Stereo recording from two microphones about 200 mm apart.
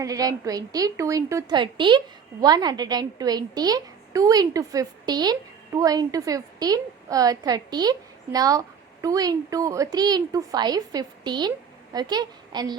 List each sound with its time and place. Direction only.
0.0 s a woman's voice: 15° right (ahead or behind)